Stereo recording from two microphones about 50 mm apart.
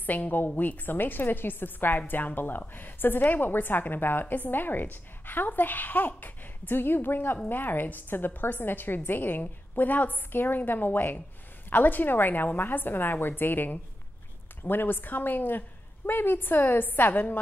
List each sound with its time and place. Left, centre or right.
0.0 s a woman's voice: left